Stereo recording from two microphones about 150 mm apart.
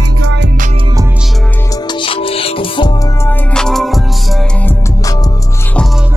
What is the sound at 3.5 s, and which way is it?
Music, 5° left (ahead or behind).